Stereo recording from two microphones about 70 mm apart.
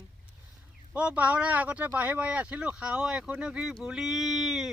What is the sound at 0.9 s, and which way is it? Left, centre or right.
Speech, right.